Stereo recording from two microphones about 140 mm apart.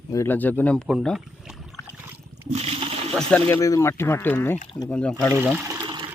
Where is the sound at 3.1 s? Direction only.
5° left (ahead or behind).